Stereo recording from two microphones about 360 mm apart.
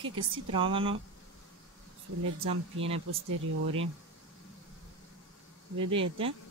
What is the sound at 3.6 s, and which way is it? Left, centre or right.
Speech, right.